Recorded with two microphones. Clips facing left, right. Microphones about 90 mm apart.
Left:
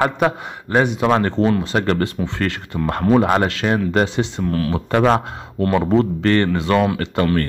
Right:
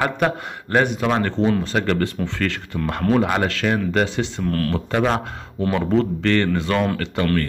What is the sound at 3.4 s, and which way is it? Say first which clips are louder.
Speech: left 2 dB; 25° left (ahead or behind).